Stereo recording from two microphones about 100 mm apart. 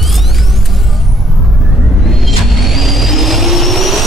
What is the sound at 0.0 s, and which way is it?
Music, centre (ahead or behind).